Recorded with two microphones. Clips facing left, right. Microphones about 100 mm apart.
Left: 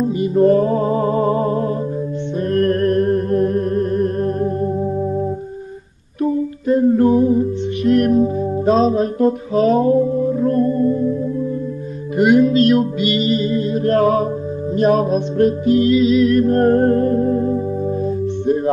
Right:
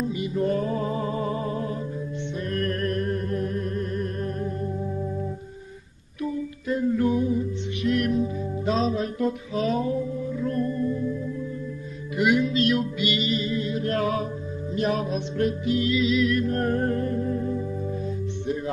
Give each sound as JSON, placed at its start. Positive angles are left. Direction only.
{"t": 0.0, "sound": "music", "side_deg": 40}
{"t": 6.2, "sound": "music", "side_deg": 40}
{"t": 12.2, "sound": "music", "side_deg": 45}